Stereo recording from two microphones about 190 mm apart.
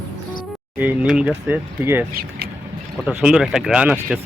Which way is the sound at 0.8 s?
5° right (ahead or behind).